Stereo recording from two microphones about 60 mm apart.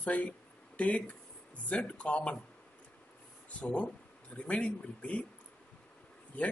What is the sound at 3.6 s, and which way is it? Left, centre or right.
Speech, centre.